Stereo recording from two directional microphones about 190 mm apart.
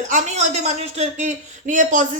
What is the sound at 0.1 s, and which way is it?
Speech, 35° right (ahead or behind).